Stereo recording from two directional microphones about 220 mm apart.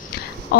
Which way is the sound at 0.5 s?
45° left (ahead or behind).